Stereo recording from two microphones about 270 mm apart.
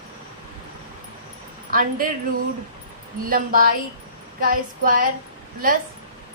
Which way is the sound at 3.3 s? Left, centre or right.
Right.